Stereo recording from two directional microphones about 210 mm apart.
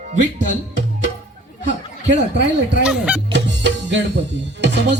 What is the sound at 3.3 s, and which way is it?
Music, 55° right (ahead or behind).